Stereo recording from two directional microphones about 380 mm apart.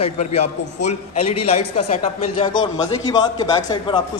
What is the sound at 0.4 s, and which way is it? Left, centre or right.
Speech, left.